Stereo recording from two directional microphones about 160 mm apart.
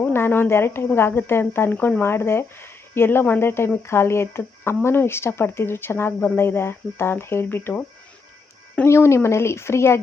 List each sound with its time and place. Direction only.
0.0 s speech: 15° left (ahead or behind)